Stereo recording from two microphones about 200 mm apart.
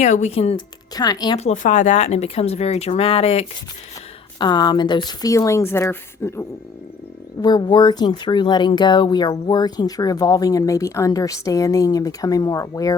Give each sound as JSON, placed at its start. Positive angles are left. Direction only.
{"t": 0.0, "sound": "speech", "side_deg": 35}
{"t": 1.4, "sound": "speech", "side_deg": 35}
{"t": 7.4, "sound": "speech", "side_deg": 20}